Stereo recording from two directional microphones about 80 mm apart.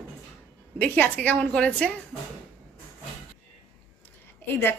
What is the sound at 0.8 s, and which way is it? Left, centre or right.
A woman's voice, left.